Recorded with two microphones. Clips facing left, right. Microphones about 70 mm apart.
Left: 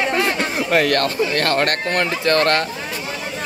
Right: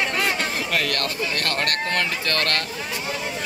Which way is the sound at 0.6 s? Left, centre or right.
Left.